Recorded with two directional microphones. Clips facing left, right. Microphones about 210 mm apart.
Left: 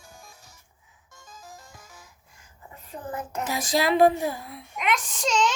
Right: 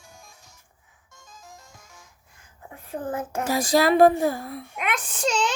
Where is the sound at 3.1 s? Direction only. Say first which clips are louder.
Right 4 dB; 50° right (ahead or behind).